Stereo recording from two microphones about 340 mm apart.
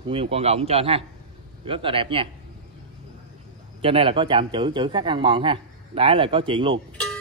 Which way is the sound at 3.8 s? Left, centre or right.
Centre.